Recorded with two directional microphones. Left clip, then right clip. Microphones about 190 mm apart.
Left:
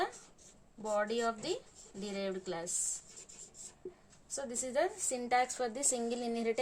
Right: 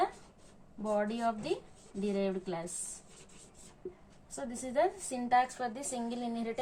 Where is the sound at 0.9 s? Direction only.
45° left (ahead or behind).